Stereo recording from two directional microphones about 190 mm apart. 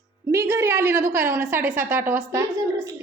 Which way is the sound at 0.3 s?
15° right (ahead or behind).